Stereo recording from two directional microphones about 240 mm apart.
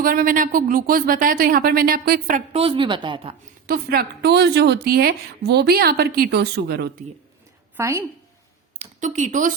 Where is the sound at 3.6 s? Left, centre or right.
Right.